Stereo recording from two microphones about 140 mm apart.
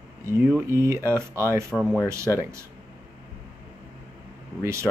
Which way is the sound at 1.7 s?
Centre (ahead or behind).